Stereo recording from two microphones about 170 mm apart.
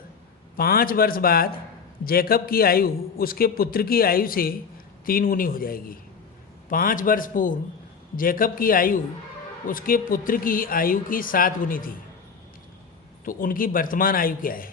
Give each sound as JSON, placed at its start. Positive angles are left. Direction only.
{"t": 0.5, "sound": "a man's voice", "side_deg": 60}
{"t": 13.2, "sound": "a man's voice", "side_deg": 55}